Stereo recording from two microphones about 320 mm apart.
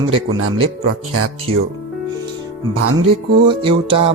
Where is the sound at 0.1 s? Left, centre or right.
Right.